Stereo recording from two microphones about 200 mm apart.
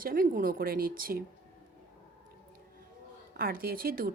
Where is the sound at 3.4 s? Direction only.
45° right (ahead or behind).